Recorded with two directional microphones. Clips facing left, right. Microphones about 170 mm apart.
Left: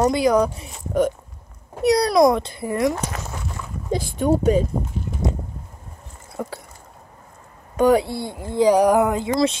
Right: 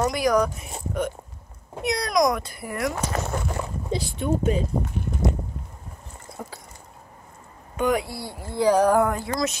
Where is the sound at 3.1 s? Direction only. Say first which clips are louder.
Right 5 dB; 40° right (ahead or behind).